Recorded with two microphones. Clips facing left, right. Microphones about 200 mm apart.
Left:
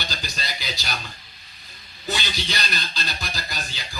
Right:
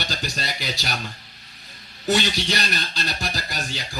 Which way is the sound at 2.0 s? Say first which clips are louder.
Right 7 dB; 70° right (ahead or behind).